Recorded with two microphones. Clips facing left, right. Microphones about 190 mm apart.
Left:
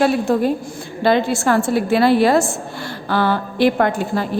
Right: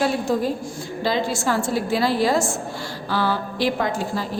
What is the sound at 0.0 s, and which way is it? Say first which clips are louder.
A woman's voice: left 5 dB; 60° left (ahead or behind).